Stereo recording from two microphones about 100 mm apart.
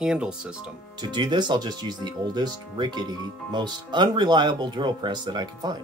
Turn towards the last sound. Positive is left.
turn(degrees=-45)  # may be behind; listen again after turning